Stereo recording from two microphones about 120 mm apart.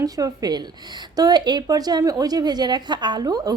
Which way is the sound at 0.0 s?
30° right (ahead or behind).